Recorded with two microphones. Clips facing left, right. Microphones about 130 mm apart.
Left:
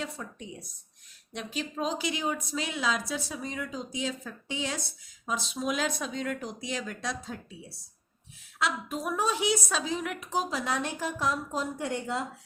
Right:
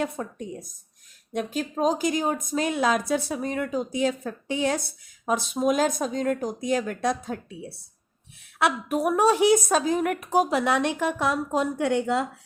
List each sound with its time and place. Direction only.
0.0 s a woman's voice: 50° right (ahead or behind); by 12.2 s 70° right (ahead or behind)